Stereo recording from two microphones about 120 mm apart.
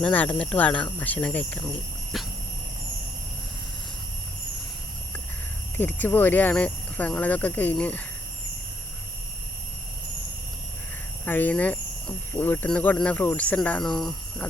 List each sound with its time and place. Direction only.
0.0 s speech: 15° left (ahead or behind)
2.1 s dog: centre (ahead or behind)
5.7 s speech: 15° left (ahead or behind)
11.3 s speech: 15° left (ahead or behind)